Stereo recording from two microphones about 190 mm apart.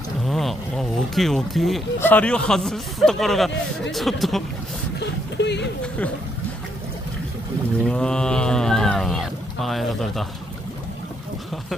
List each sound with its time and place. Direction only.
0.2 s a sound: centre (ahead or behind)
2.0 s speech: 10° left (ahead or behind)
5.4 s speech: 65° left (ahead or behind)
7.8 s speech: 5° left (ahead or behind)